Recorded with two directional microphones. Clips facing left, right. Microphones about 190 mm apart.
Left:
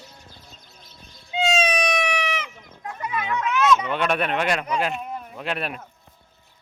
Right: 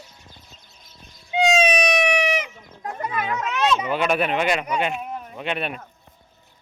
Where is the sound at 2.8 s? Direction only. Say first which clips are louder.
Right 2 dB; 45° right (ahead or behind).